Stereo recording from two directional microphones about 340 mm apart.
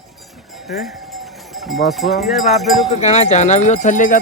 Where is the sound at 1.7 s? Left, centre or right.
Centre.